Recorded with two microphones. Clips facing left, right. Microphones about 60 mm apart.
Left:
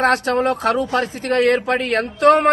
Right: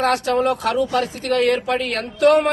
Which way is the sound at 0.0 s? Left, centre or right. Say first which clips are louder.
Left 1 dB; left.